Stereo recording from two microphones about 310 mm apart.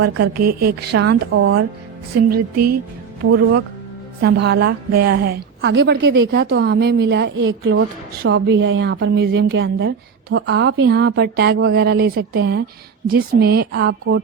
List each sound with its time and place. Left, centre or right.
0.0 s a woman's voice: right
2.3 s speech: right
3.2 s a woman's voice: right